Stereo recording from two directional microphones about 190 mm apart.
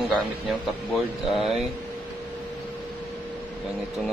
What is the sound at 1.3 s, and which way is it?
Speech, centre (ahead or behind).